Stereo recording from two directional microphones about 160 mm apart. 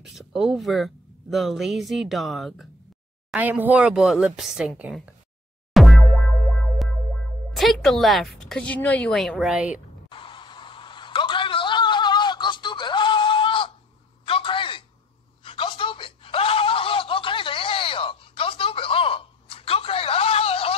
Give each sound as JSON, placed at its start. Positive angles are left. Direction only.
{"t": 0.0, "sound": "speech", "side_deg": 0}
{"t": 5.7, "sound": "boing", "side_deg": 0}
{"t": 7.5, "sound": "speech", "side_deg": 0}
{"t": 10.0, "sound": "a sound", "side_deg": 30}